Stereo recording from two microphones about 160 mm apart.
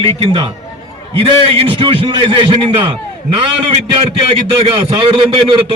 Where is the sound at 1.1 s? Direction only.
35° right (ahead or behind).